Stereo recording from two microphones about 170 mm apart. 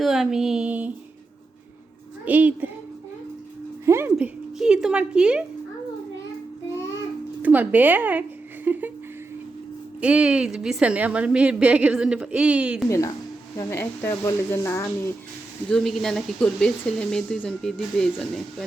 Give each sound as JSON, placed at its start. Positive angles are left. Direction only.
{"t": 0.0, "sound": "a woman's voice", "side_deg": 0}
{"t": 2.2, "sound": "a woman's voice", "side_deg": -10}
{"t": 3.8, "sound": "speech", "side_deg": -15}
{"t": 4.5, "sound": "a woman's voice", "side_deg": -5}
{"t": 7.4, "sound": "speech", "side_deg": -10}
{"t": 8.6, "sound": "a sound", "side_deg": -10}
{"t": 10.0, "sound": "a woman's voice", "side_deg": -5}
{"t": 12.9, "sound": "a woman's voice", "side_deg": 20}
{"t": 15.7, "sound": "a woman's voice", "side_deg": 0}